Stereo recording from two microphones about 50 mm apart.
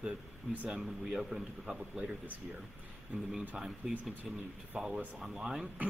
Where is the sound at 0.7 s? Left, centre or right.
Centre.